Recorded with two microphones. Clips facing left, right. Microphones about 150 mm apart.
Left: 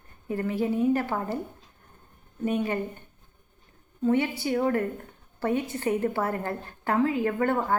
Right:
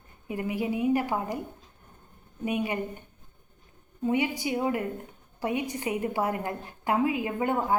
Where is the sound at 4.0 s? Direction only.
15° right (ahead or behind).